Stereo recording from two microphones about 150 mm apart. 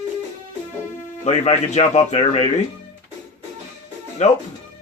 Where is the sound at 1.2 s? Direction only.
45° left (ahead or behind).